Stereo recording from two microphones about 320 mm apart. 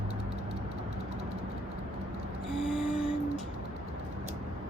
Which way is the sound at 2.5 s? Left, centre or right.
Centre.